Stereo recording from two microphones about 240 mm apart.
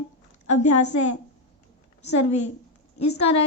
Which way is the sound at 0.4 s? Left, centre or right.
Left.